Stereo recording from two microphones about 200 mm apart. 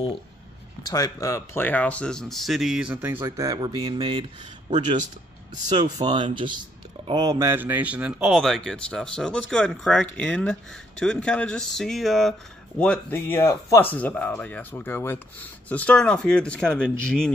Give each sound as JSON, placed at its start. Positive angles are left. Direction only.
{"t": 0.8, "sound": "speech", "side_deg": 15}